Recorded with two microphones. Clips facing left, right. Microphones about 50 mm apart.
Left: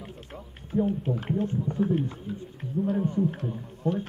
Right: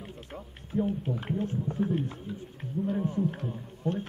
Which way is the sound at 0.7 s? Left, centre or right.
Centre.